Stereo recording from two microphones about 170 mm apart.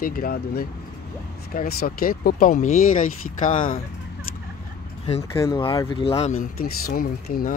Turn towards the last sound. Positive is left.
turn(degrees=60)  # may be behind; listen again after turning